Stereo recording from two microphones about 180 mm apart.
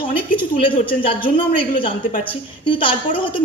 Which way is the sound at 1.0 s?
30° left (ahead or behind).